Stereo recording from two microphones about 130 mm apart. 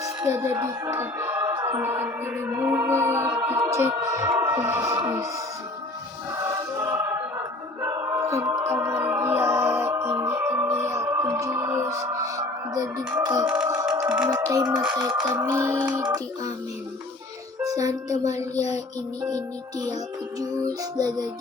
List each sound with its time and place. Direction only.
0.2 s speech: 20° right (ahead or behind)
6.3 s music: 25° right (ahead or behind)
14.3 s speech: 25° right (ahead or behind)
17.6 s music: 25° right (ahead or behind)
18.1 s a sound: 60° left (ahead or behind)
20.4 s speech: 30° right (ahead or behind)